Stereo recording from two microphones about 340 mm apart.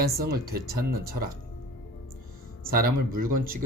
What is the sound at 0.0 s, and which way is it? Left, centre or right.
Speech, right.